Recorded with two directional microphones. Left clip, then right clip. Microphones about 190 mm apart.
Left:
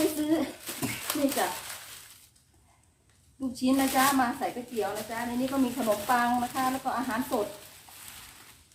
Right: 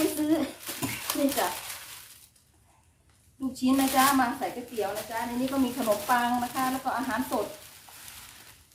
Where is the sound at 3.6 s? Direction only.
15° right (ahead or behind).